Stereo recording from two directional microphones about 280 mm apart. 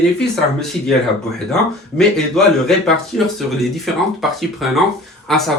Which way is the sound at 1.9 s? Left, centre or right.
Centre.